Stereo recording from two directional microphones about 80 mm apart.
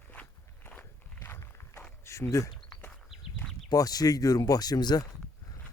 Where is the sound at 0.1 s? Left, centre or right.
Left.